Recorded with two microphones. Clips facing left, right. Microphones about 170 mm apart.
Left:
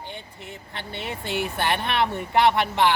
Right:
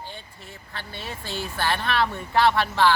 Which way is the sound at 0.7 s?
20° left (ahead or behind).